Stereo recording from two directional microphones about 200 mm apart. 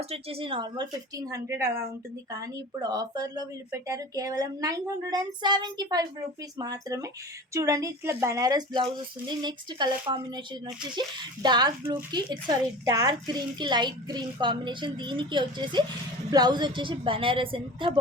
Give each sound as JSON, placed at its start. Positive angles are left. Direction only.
{"t": 0.0, "sound": "a woman's voice", "side_deg": -30}
{"t": 2.9, "sound": "a woman's voice", "side_deg": -20}